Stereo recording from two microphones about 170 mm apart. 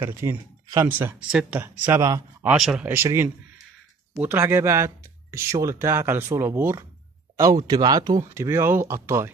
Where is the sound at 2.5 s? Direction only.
5° right (ahead or behind).